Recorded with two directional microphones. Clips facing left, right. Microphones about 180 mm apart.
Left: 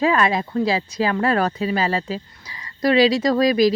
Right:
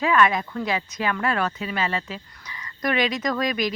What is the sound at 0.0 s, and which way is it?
Speech, 30° left (ahead or behind).